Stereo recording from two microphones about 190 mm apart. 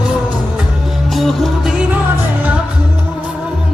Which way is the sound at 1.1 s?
Centre (ahead or behind).